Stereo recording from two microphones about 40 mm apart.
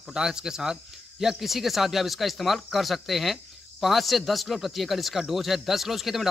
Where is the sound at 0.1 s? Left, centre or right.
Centre.